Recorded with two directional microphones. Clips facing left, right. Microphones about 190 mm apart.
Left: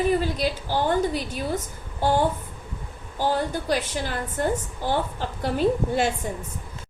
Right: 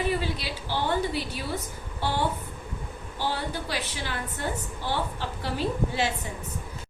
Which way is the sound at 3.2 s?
45° left (ahead or behind).